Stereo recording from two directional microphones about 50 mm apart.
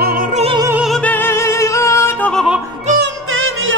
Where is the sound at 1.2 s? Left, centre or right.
Left.